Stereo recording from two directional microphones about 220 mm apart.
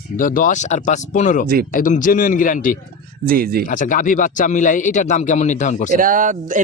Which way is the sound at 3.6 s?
35° left (ahead or behind).